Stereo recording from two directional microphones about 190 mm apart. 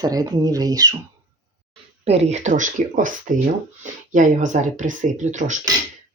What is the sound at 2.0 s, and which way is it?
Speech, 35° right (ahead or behind).